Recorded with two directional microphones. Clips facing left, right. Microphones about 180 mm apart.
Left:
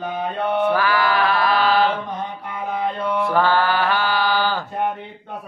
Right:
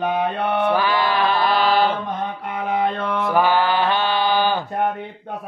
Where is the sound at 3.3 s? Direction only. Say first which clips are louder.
Right 2 dB; 15° right (ahead or behind).